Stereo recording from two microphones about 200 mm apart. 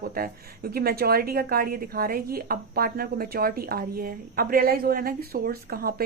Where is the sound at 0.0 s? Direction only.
50° right (ahead or behind).